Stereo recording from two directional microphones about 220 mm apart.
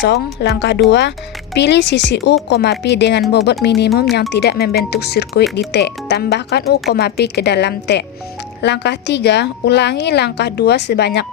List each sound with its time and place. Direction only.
0.0 s a woman's voice: 50° left (ahead or behind)